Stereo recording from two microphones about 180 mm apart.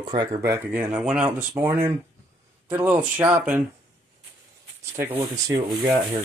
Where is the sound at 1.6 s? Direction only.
15° right (ahead or behind).